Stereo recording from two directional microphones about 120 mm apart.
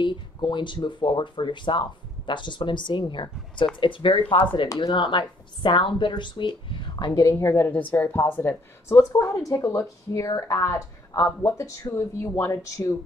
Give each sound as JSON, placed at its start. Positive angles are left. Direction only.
{"t": 0.0, "sound": "speech", "side_deg": 40}